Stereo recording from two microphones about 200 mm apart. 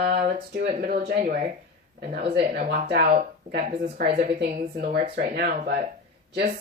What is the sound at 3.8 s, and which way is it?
A woman's voice, 55° right (ahead or behind).